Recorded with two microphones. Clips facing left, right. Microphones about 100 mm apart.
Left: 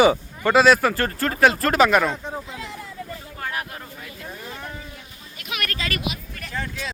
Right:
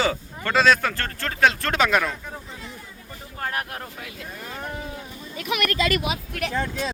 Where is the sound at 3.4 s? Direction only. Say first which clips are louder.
Right 2 dB; 45° right (ahead or behind).